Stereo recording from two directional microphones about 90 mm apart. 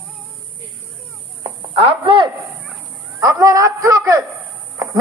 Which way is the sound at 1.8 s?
85° right.